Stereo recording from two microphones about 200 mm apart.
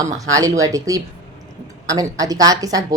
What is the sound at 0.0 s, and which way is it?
A woman's voice, 15° right (ahead or behind).